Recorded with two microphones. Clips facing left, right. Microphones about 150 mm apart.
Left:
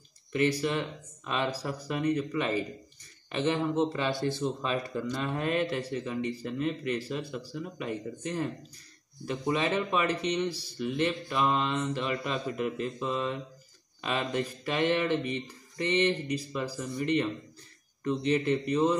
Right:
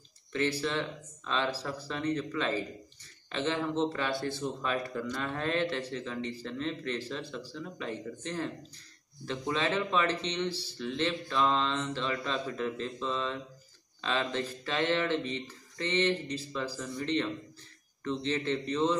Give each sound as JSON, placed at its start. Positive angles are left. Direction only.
{"t": 0.3, "sound": "speech", "side_deg": 15}